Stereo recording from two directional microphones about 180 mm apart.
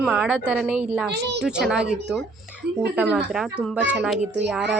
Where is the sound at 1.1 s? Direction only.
70° right (ahead or behind).